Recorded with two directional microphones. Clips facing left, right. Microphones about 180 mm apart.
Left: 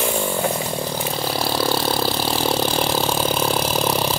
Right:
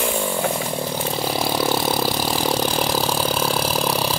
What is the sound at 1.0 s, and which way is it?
Vehicle, 5° right (ahead or behind).